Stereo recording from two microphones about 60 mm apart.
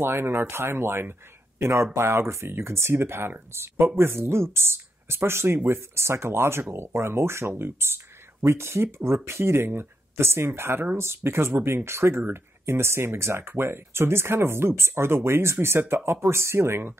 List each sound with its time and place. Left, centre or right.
0.0 s speech: right